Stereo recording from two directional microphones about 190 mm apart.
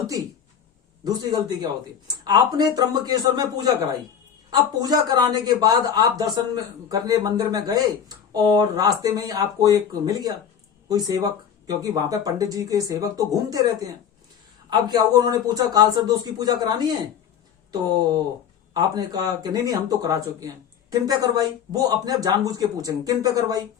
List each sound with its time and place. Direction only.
1.0 s speech: 20° right (ahead or behind)